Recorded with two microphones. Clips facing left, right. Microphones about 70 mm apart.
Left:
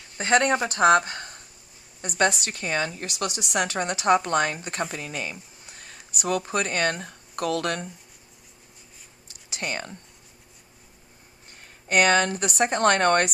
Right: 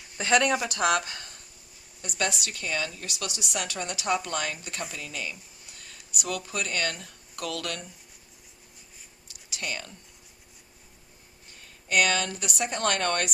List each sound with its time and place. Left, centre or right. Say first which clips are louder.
0.2 s a woman's voice: left 3 dB; left
9.5 s speech: left 4 dB; left
11.6 s a woman's voice: left 4 dB; left